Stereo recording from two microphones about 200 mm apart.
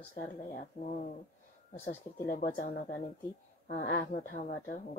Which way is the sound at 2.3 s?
40° left (ahead or behind).